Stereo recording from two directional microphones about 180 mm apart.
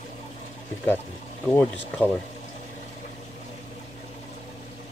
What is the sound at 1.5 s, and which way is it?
Speech, 5° left (ahead or behind).